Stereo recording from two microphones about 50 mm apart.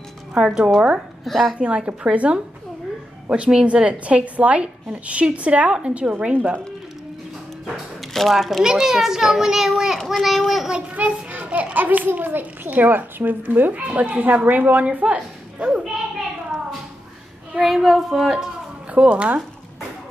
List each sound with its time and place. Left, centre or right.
0.4 s a child's voice: centre
1.2 s a child's voice: centre
1.6 s a woman's voice: right
3.6 s a woman's voice: right
8.1 s a child's voice: centre
11.0 s a sound: right
12.2 s a child's voice: right
17.6 s a child's voice: centre
18.9 s a woman's voice: right